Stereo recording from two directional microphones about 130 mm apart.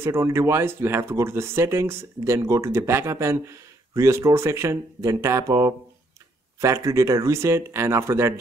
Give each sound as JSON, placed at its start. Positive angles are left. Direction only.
{"t": 0.0, "sound": "speech", "side_deg": -20}